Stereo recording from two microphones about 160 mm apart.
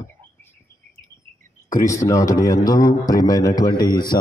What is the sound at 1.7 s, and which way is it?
A man's voice, 20° left (ahead or behind).